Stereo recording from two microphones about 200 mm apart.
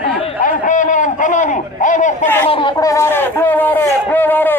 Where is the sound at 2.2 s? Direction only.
10° left (ahead or behind).